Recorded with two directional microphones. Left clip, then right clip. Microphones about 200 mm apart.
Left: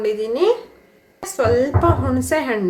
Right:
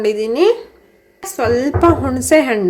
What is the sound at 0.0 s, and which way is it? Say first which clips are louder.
A woman's voice: right 4 dB; 35° right (ahead or behind).